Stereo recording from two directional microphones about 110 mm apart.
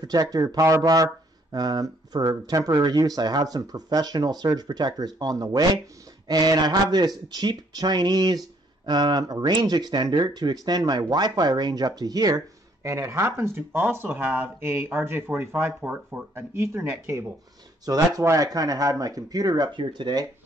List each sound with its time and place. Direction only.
0.0 s speech: 35° right (ahead or behind); by 16.4 s 15° right (ahead or behind)
16.5 s speech: 25° right (ahead or behind); by 20.2 s 40° right (ahead or behind)